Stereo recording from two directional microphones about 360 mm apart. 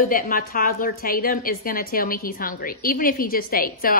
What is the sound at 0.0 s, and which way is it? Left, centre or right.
A woman's voice, left.